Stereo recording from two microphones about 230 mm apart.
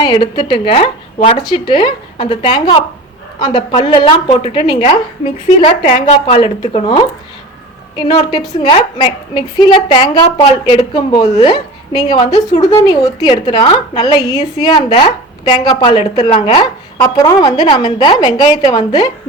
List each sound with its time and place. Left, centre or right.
0.0 s a woman's voice: centre